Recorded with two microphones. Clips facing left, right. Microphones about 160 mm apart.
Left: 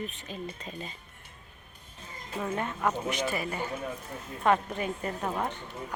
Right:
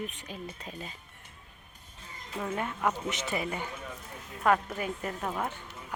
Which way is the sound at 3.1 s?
20° right (ahead or behind).